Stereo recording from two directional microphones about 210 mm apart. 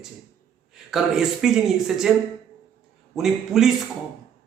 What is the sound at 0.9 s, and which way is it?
Speech, centre (ahead or behind).